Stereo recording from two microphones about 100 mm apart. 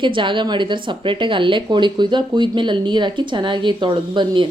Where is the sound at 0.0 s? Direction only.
55° right (ahead or behind).